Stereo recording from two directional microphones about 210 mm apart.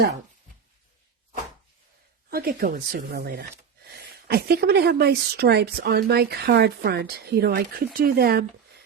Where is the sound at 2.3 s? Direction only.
45° right (ahead or behind).